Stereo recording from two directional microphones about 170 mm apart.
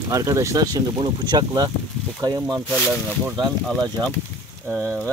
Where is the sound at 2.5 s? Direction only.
Centre (ahead or behind).